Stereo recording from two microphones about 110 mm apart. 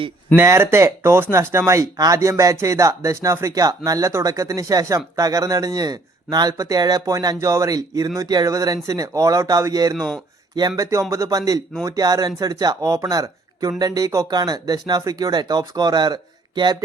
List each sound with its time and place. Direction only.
0.3 s speech: 25° right (ahead or behind); by 16.7 s 40° right (ahead or behind)